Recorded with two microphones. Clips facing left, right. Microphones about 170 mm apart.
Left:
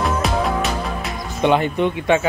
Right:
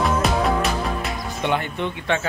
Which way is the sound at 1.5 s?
20° left (ahead or behind).